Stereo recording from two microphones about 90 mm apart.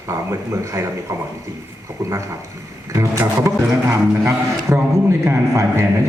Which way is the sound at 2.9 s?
35° right (ahead or behind).